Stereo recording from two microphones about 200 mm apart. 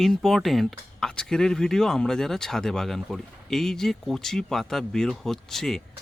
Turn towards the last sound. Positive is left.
turn(degrees=0)  # may be behind; listen again after turning